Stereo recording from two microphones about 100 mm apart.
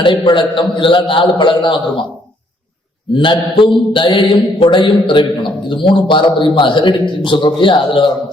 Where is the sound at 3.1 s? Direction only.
60° left (ahead or behind).